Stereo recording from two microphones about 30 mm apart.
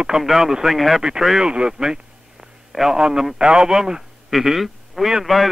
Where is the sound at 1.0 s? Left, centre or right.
Right.